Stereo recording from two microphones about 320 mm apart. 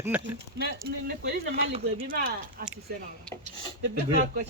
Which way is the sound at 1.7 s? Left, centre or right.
Centre.